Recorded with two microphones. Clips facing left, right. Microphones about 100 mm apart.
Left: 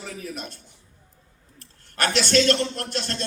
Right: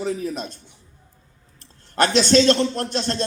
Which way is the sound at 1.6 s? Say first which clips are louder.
Right 6 dB; 30° right (ahead or behind).